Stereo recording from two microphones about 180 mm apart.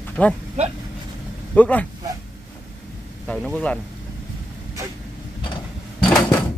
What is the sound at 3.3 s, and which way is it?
Speech, 5° left (ahead or behind).